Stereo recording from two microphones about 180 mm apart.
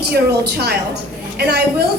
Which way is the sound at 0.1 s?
65° right (ahead or behind).